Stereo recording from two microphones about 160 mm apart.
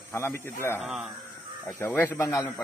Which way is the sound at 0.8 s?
Centre (ahead or behind).